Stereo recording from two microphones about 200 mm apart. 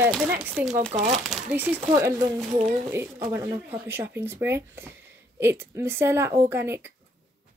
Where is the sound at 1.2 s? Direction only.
5° right (ahead or behind).